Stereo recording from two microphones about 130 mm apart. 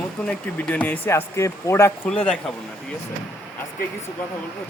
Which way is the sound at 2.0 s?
10° left (ahead or behind).